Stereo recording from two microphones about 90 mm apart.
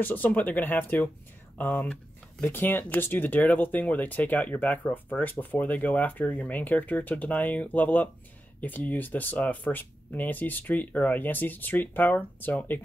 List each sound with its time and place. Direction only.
0.0 s speech: 20° left (ahead or behind)